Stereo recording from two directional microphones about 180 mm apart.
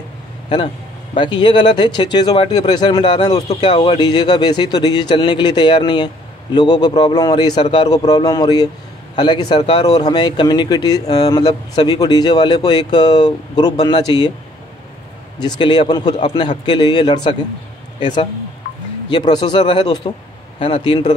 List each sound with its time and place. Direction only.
1.1 s speech: 25° left (ahead or behind)
15.4 s speech: 25° left (ahead or behind)
19.0 s speech: 25° left (ahead or behind)